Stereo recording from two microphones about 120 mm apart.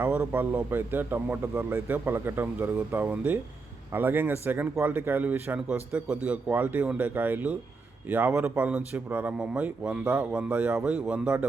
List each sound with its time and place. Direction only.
0.0 s speech: 15° right (ahead or behind)